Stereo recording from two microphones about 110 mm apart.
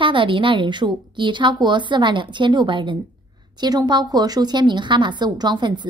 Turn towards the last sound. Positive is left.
turn(degrees=-45)  # may be behind; listen again after turning